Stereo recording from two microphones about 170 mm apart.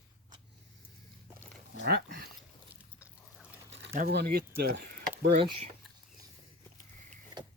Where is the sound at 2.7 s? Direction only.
10° right (ahead or behind).